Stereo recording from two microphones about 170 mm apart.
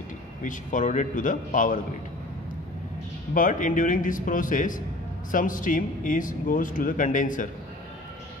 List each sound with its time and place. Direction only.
0.4 s a man's voice: 50° left (ahead or behind)
3.3 s a man's voice: 50° left (ahead or behind)